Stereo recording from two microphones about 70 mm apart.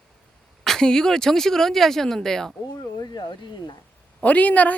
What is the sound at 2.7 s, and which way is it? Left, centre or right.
Speech, left.